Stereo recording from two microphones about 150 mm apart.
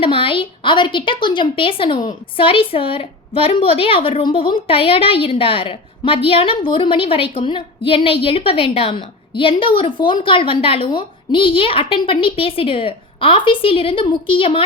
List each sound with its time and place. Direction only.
0.0 s a woman's voice: 35° left (ahead or behind)